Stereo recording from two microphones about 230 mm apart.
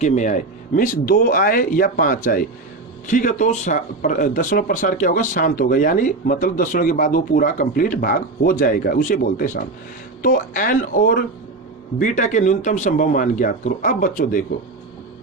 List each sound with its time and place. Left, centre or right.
0.0 s speech: left